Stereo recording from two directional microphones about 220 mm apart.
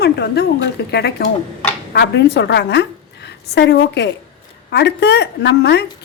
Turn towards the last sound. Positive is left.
turn(degrees=50)  # may be behind; listen again after turning